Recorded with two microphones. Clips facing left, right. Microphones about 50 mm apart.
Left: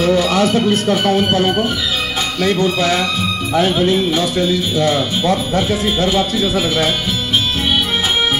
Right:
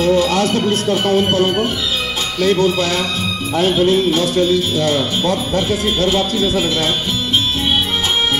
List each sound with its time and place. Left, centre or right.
0.3 s music: left
0.8 s speech: left
2.6 s speech: left